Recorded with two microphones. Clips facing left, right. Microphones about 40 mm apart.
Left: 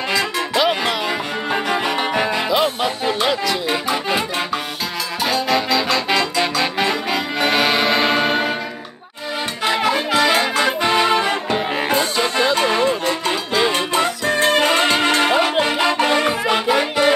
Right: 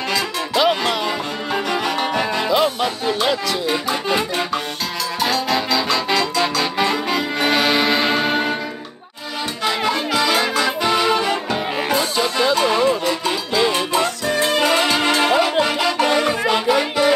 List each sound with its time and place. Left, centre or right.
0.1 s music: centre
5.2 s music: centre
9.7 s brass instrument: centre
12.2 s music: left
14.2 s music: left
16.0 s music: centre